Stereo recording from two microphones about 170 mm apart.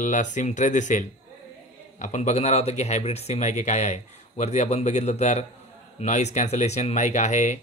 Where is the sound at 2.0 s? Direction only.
45° left (ahead or behind).